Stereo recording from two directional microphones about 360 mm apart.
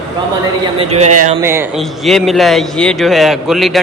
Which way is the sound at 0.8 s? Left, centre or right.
Centre.